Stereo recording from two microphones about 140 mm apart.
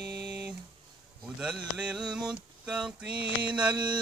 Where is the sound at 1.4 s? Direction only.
5° right (ahead or behind).